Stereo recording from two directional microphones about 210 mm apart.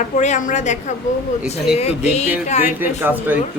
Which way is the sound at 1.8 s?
30° left (ahead or behind).